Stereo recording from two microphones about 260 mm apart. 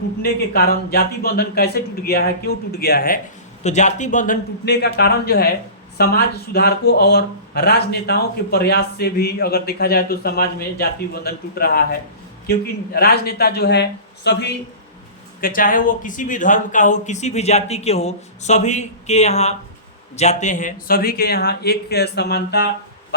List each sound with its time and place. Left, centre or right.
0.2 s speech: left